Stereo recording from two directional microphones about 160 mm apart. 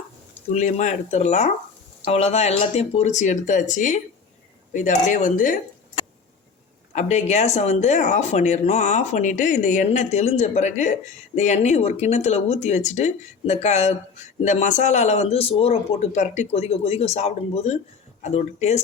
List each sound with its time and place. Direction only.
0.5 s speech: 50° left (ahead or behind)
6.9 s a man's voice: 45° left (ahead or behind)